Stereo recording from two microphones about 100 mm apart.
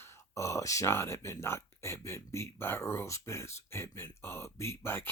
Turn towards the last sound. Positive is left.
turn(degrees=25)  # may be behind; listen again after turning